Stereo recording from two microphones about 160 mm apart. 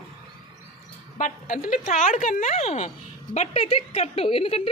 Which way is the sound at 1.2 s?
60° left (ahead or behind).